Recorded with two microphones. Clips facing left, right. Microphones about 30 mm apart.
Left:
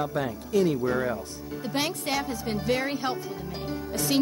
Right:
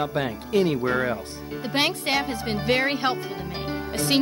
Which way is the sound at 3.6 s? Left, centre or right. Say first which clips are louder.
Right 3 dB; right.